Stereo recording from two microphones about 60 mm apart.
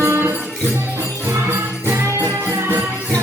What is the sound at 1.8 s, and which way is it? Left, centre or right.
Jingle bell, right.